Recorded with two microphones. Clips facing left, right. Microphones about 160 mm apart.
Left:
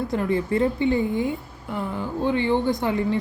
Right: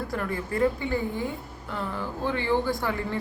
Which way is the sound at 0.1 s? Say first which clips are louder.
Left 7 dB; 25° left (ahead or behind).